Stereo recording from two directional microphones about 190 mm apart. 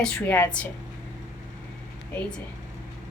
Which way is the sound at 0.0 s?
10° left (ahead or behind).